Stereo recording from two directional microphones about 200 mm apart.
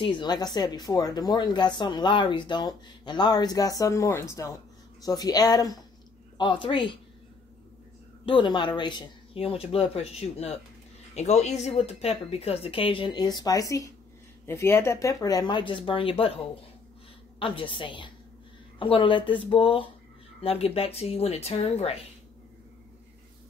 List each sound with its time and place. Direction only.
0.0 s speech: 25° left (ahead or behind)
8.3 s speech: 25° left (ahead or behind)
17.4 s speech: 25° left (ahead or behind)